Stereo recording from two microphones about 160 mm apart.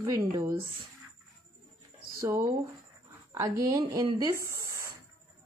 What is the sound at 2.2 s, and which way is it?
Speech, 20° right (ahead or behind).